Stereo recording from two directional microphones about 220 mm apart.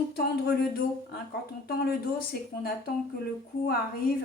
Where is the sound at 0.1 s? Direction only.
45° left (ahead or behind).